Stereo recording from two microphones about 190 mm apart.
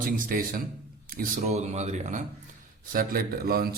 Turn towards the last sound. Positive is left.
turn(degrees=-50)  # may be behind; listen again after turning